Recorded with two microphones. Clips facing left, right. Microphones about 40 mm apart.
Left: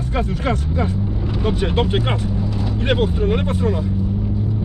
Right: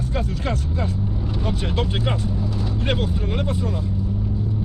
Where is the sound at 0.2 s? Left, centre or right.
Left.